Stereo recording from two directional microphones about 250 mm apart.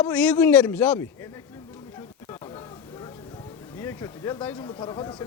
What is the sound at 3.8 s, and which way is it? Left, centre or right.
Speech, centre.